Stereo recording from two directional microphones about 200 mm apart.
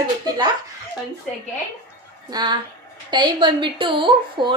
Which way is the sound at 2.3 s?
20° right (ahead or behind).